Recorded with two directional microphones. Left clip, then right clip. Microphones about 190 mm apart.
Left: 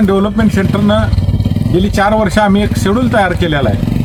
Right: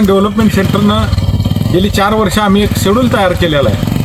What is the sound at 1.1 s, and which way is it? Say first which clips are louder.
Vehicle: right 1 dB; 30° right (ahead or behind).